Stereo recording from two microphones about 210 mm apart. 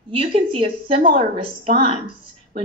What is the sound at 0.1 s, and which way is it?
Speech, 25° right (ahead or behind).